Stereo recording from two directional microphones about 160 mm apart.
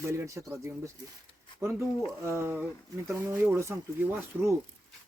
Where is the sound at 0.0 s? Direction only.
15° right (ahead or behind).